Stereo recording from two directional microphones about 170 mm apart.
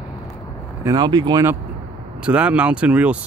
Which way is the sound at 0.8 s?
25° right (ahead or behind).